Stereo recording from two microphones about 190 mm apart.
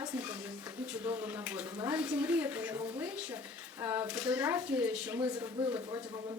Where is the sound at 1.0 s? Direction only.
10° right (ahead or behind).